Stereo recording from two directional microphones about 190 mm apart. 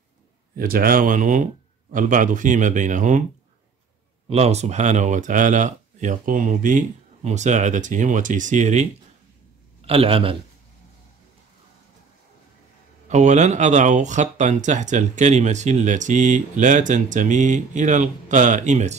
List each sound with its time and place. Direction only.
0.6 s speech: 50° right (ahead or behind)
4.3 s speech: 35° right (ahead or behind)
9.8 s a man's voice: 30° right (ahead or behind)
13.1 s speech: 40° right (ahead or behind)